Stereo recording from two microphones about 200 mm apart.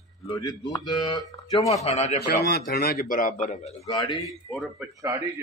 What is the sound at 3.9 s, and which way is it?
Speech, 20° left (ahead or behind).